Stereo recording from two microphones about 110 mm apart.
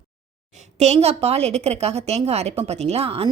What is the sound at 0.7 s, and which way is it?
A woman's voice, 75° right (ahead or behind).